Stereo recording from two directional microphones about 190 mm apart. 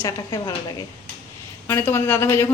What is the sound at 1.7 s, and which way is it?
Speech, 10° left (ahead or behind).